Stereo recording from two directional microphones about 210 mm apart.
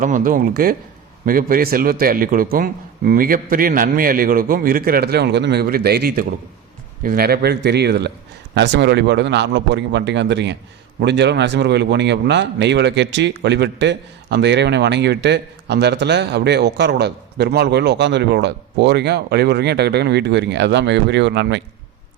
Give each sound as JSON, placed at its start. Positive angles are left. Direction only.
{"t": 0.0, "sound": "a man's voice", "side_deg": -40}